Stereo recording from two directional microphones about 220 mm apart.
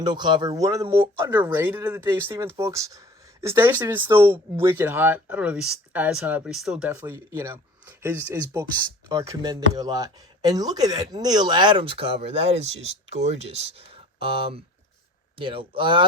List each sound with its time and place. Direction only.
0.0 s speech: 20° right (ahead or behind)